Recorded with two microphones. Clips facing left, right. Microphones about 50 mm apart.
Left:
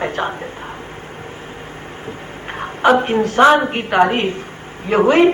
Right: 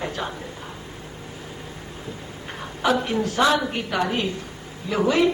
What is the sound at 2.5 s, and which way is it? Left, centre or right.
A man's voice, left.